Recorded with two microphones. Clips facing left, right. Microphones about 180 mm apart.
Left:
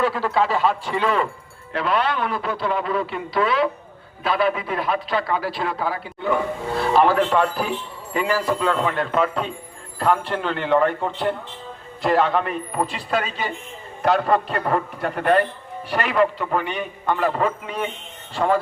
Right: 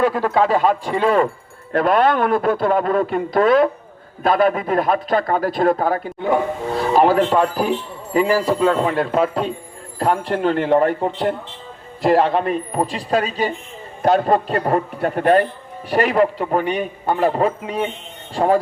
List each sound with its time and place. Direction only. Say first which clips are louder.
0.0 s a man's voice: right 4 dB; 45° right (ahead or behind)